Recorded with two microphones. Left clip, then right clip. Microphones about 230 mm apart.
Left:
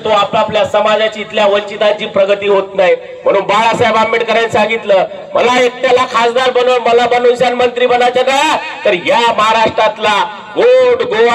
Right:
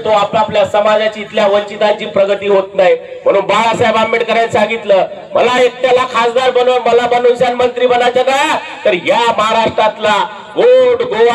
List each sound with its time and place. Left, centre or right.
0.0 s speech: centre; by 11.3 s left